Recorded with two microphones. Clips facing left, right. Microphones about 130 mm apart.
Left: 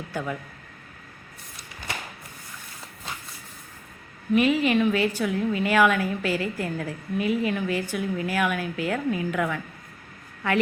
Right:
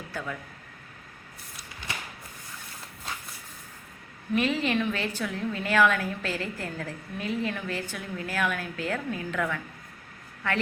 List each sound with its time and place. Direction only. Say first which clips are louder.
0.1 s speech: left 5 dB; 20° left (ahead or behind)
4.4 s a woman's voice: left 5 dB; 10° left (ahead or behind)